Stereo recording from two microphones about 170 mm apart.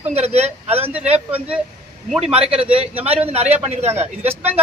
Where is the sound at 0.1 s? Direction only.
40° right (ahead or behind).